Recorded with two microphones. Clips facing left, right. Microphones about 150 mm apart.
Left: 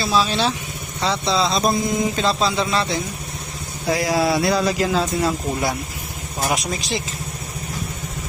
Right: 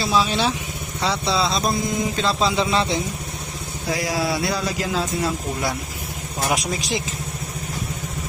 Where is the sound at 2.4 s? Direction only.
20° right (ahead or behind).